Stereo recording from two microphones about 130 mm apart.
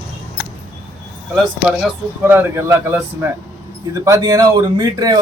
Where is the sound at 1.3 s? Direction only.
Centre (ahead or behind).